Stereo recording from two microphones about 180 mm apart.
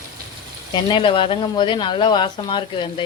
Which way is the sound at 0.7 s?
25° left (ahead or behind).